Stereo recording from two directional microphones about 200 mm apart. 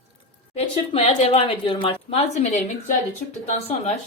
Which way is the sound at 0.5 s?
30° left (ahead or behind).